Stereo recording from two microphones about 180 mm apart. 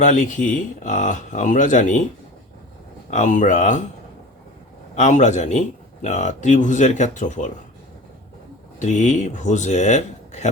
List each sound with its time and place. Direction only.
0.0 s speech: 45° left (ahead or behind)
3.1 s speech: 40° left (ahead or behind)
4.9 s speech: 40° left (ahead or behind)
8.8 s speech: 40° left (ahead or behind)